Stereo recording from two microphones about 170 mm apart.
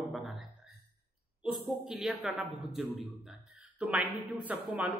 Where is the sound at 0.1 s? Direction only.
Centre (ahead or behind).